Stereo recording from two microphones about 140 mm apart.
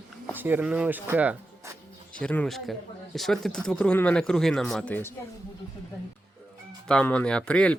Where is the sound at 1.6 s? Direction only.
20° right (ahead or behind).